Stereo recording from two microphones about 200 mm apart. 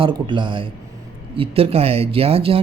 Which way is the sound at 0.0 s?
25° right (ahead or behind).